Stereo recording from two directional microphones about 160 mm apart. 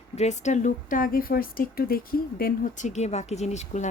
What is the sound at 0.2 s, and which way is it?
A woman's voice, 45° left (ahead or behind).